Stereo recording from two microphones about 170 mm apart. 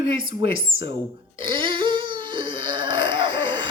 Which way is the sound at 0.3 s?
30° right (ahead or behind).